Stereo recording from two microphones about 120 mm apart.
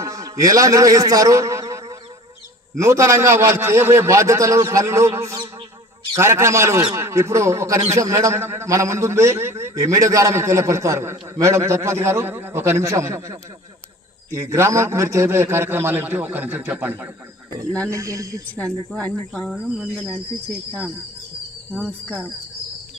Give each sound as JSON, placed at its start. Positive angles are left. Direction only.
{"t": 0.0, "sound": "a sound", "side_deg": -30}
{"t": 2.7, "sound": "a man's voice", "side_deg": -25}
{"t": 17.7, "sound": "speech", "side_deg": 10}
{"t": 17.9, "sound": "a man's voice", "side_deg": -25}
{"t": 18.4, "sound": "speech", "side_deg": 10}
{"t": 19.5, "sound": "speech", "side_deg": -5}
{"t": 21.8, "sound": "speech", "side_deg": 5}